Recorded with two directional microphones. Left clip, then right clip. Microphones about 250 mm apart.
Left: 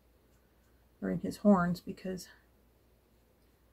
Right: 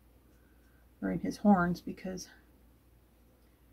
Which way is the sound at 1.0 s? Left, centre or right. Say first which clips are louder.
Even; left.